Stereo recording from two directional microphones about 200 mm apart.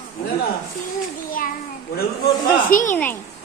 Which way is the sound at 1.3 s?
45° left (ahead or behind).